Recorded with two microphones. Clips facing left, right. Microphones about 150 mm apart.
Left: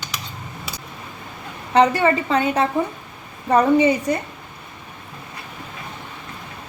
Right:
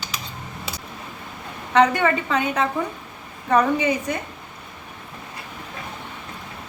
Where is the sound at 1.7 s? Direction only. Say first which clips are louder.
Left 2 dB; 35° left (ahead or behind).